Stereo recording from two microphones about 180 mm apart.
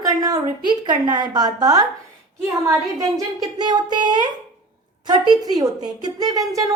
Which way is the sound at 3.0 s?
20° right (ahead or behind).